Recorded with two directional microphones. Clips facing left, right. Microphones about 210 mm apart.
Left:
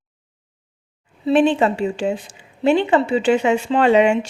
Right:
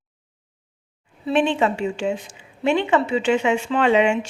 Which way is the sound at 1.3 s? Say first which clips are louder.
Left 4 dB; 35° left (ahead or behind).